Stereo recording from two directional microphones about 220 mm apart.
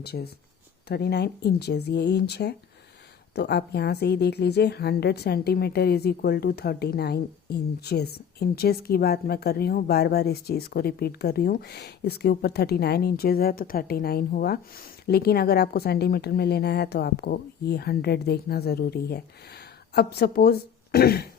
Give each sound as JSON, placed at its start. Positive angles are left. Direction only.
{"t": 0.0, "sound": "a woman's voice", "side_deg": 45}